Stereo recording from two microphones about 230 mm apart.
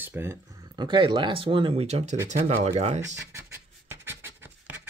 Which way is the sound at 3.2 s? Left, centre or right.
Centre.